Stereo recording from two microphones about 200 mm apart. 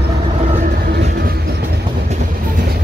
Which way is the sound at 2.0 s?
40° right (ahead or behind).